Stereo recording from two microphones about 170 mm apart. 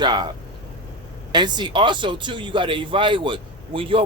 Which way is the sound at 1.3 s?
25° right (ahead or behind).